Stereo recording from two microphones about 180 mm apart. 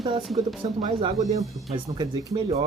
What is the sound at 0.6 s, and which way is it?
Speech, 25° right (ahead or behind).